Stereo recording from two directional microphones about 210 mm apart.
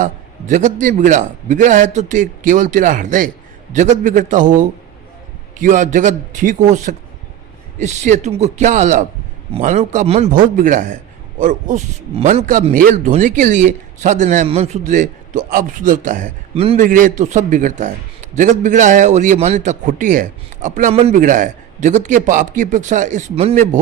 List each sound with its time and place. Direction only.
0.0 s a man's voice: 35° right (ahead or behind)